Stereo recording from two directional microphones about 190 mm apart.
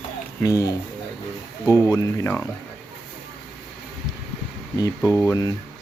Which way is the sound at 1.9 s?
10° left (ahead or behind).